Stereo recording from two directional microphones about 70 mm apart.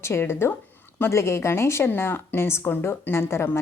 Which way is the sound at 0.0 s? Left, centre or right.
Left.